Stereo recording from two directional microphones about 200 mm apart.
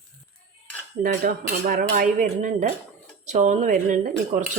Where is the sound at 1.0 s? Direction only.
45° right (ahead or behind).